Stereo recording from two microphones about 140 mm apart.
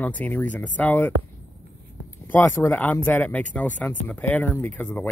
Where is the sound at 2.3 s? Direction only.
15° left (ahead or behind).